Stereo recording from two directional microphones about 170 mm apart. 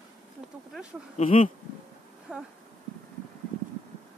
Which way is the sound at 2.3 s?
5° right (ahead or behind).